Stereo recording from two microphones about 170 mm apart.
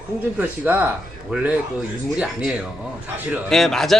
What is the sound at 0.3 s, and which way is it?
A man's voice, 10° right (ahead or behind).